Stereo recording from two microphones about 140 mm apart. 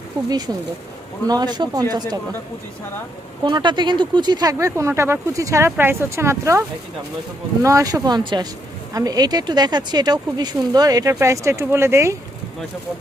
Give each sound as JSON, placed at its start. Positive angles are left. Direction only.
{"t": 0.3, "sound": "speech", "side_deg": -30}
{"t": 3.4, "sound": "speech", "side_deg": -35}
{"t": 4.5, "sound": "speech", "side_deg": -20}